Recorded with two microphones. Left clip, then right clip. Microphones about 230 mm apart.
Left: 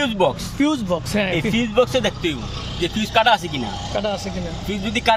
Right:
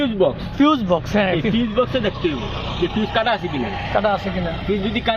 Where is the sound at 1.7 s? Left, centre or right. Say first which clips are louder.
Left 3 dB; left.